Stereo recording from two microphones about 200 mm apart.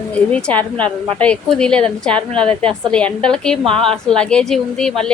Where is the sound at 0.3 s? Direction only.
5° left (ahead or behind).